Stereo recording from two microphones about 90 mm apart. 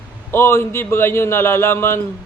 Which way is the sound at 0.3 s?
25° left (ahead or behind).